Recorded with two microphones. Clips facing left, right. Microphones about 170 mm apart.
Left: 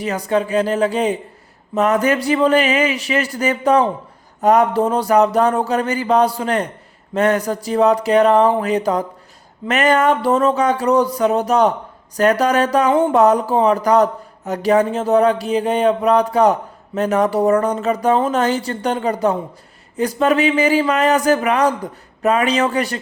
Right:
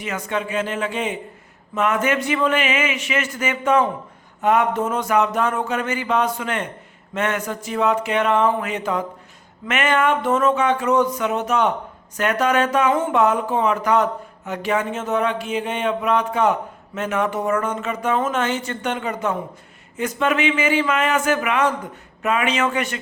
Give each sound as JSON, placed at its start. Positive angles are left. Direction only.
{"t": 0.0, "sound": "speech", "side_deg": 35}